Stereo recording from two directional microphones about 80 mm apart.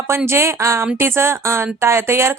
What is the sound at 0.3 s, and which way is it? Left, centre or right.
Speech, right.